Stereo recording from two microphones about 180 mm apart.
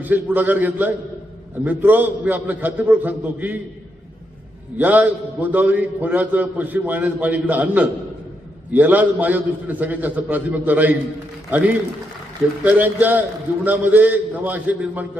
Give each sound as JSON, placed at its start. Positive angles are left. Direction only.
{"t": 0.0, "sound": "a man's voice", "side_deg": -10}
{"t": 4.8, "sound": "a man's voice", "side_deg": -10}
{"t": 12.6, "sound": "a man's voice", "side_deg": -10}